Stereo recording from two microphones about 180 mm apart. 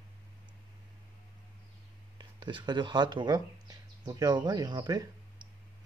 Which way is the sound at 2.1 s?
25° right (ahead or behind).